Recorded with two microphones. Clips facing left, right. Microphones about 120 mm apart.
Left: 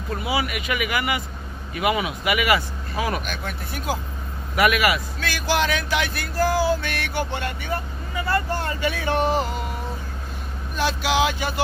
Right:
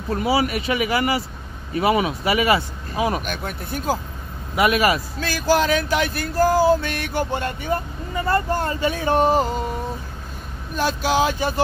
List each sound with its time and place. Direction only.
0.1 s speech: 40° right (ahead or behind)
3.3 s speech: 40° right (ahead or behind)
10.8 s speech: 40° right (ahead or behind)